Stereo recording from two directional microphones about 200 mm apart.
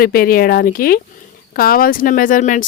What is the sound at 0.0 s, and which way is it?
Speech, 50° left (ahead or behind).